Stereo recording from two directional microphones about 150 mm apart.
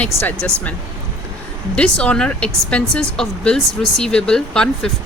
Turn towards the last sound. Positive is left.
turn(degrees=5)  # may be behind; listen again after turning